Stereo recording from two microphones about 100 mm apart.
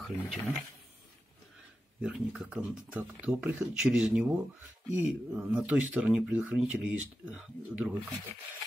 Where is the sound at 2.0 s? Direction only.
10° right (ahead or behind).